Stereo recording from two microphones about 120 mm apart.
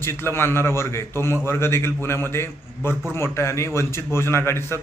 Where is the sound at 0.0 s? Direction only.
20° left (ahead or behind).